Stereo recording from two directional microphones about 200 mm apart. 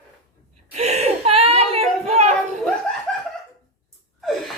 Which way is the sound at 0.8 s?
35° right (ahead or behind).